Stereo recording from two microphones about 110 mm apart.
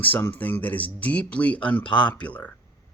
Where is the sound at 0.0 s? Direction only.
15° left (ahead or behind).